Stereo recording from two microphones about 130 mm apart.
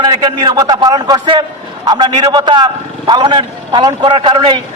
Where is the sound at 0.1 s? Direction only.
35° right (ahead or behind).